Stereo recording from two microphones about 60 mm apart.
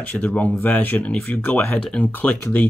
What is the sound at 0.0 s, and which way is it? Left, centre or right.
Speech, left.